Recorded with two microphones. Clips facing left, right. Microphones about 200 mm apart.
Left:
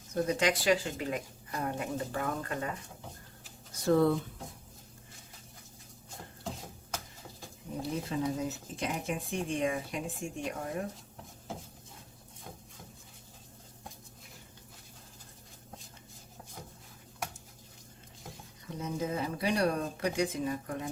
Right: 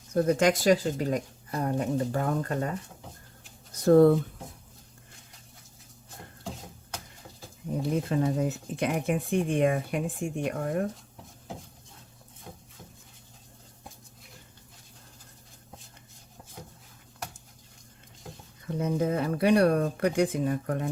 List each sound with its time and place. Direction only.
0.1 s speech: 50° right (ahead or behind)
3.8 s speech: 45° right (ahead or behind)
7.8 s speech: 55° right (ahead or behind)
18.8 s speech: 60° right (ahead or behind)